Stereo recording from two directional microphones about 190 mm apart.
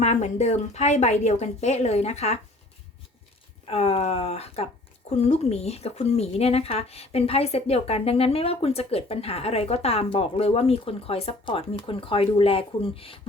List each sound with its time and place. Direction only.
0.0 s speech: 35° left (ahead or behind)
3.7 s speech: 30° left (ahead or behind)